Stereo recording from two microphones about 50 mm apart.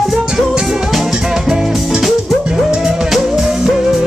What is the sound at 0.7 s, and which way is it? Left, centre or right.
Music, centre.